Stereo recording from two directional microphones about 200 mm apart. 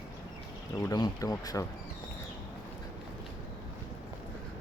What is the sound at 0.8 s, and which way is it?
Speech, 15° left (ahead or behind).